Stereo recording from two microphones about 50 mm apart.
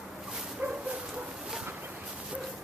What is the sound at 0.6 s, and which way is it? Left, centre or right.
Bow-wow, right.